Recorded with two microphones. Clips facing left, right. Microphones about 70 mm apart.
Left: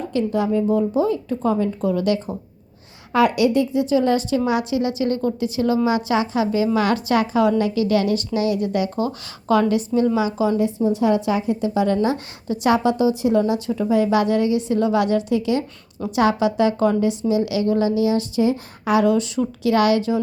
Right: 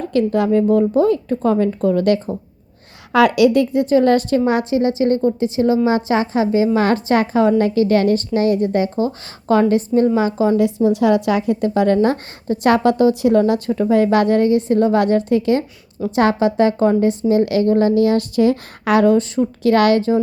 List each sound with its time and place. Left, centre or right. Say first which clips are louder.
0.1 s a woman's voice: right 5 dB; right
3.1 s a woman's voice: right 4 dB; right
10.6 s a woman's voice: right 4 dB; right
19.0 s a woman's voice: right 4 dB; right
19.7 s a woman's voice: right 3 dB; right